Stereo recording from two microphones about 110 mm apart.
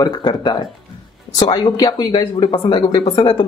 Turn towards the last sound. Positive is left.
turn(degrees=35)  # may be behind; listen again after turning